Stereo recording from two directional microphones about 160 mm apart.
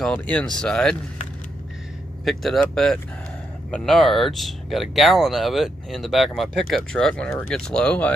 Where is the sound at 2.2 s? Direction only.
Centre (ahead or behind).